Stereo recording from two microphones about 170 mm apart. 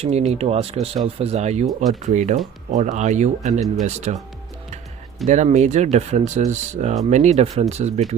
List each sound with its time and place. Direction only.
0.0 s speech: 40° right (ahead or behind)
5.2 s speech: 40° right (ahead or behind)